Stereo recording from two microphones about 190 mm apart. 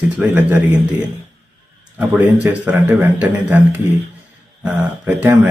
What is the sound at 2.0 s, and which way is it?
A man's voice, 5° right (ahead or behind).